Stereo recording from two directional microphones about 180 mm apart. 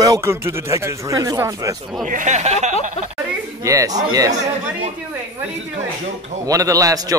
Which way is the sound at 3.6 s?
20° right (ahead or behind).